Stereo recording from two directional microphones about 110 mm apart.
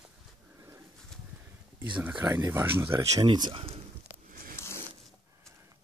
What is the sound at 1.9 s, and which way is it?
Speech, 10° right (ahead or behind).